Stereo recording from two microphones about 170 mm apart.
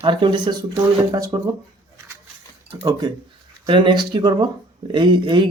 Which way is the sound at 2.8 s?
25° right (ahead or behind).